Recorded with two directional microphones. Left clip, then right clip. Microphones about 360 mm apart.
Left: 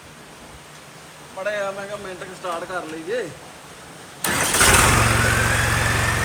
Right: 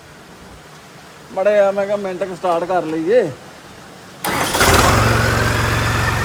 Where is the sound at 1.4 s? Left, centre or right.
Right.